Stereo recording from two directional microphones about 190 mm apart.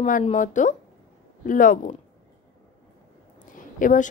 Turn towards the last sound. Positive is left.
turn(degrees=45)  # may be behind; listen again after turning